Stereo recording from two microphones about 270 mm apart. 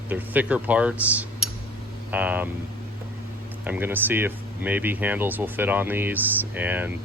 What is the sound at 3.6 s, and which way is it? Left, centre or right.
Speech, centre.